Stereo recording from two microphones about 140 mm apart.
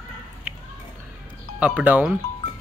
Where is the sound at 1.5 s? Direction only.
10° right (ahead or behind).